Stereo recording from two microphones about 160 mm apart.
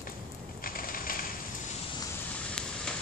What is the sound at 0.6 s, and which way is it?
Ratchet, 60° left (ahead or behind).